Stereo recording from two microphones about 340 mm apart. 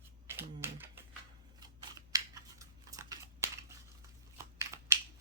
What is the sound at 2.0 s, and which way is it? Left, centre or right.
Computer keyboard, centre.